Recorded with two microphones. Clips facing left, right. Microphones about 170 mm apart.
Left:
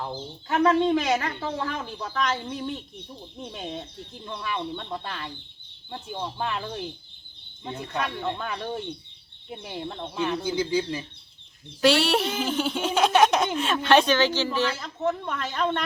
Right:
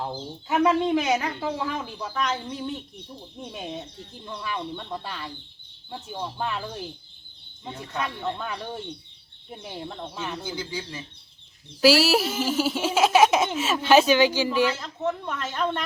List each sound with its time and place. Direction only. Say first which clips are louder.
0.4 s speech: left 1 dB; 5° right (ahead or behind)
10.4 s a man's voice: left 8 dB; 20° left (ahead or behind)
11.8 s speech: right 2 dB; 5° right (ahead or behind)
14.8 s speech: left 1 dB; centre (ahead or behind)